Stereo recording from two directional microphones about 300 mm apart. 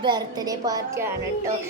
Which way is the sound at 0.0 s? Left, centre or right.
Centre.